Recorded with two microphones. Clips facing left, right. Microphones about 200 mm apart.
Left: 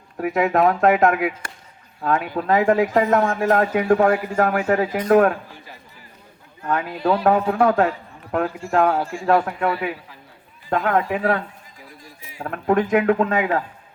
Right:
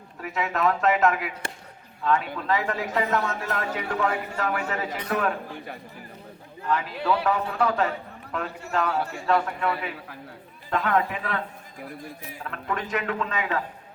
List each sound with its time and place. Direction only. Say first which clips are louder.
0.2 s speech: left 8 dB; 55° left (ahead or behind)
6.7 s a man's voice: left 5 dB; 55° left (ahead or behind)
11.8 s a man's voice: right 8 dB; 55° right (ahead or behind)
12.4 s speech: left 12 dB; 50° left (ahead or behind)